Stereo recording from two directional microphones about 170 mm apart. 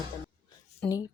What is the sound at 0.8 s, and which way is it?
Speech, 20° left (ahead or behind).